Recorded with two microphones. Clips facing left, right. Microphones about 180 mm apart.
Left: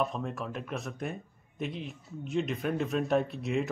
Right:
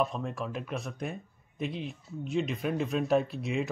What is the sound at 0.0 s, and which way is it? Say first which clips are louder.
Speech: right 1 dB; centre (ahead or behind).